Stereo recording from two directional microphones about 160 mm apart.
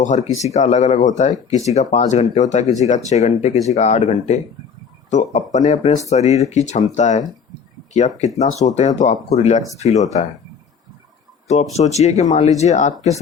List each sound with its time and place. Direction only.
0.0 s speech: 45° left (ahead or behind)
11.4 s speech: 45° left (ahead or behind)